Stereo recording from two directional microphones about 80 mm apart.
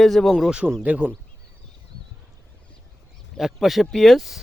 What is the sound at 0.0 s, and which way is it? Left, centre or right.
Speech, centre.